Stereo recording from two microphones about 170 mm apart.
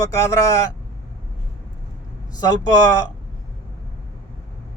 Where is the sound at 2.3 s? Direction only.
20° left (ahead or behind).